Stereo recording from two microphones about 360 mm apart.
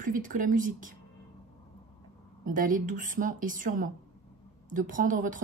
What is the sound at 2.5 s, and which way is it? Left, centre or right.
Speech, right.